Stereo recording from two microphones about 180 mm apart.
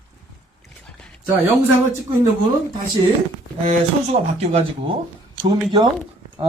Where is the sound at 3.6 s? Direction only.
35° right (ahead or behind).